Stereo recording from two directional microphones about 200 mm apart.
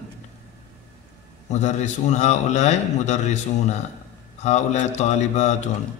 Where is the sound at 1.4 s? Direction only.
35° left (ahead or behind).